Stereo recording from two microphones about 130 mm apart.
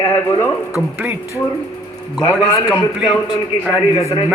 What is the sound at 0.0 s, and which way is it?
Speech, 25° left (ahead or behind).